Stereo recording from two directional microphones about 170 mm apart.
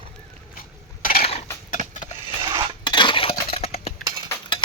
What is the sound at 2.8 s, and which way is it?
Dishes, 25° left (ahead or behind).